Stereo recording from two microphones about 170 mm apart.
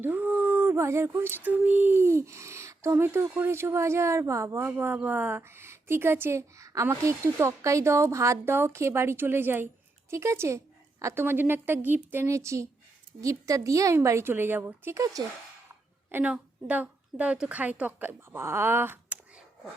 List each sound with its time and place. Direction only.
0.0 s speech: 10° right (ahead or behind)
16.1 s speech: 10° right (ahead or behind)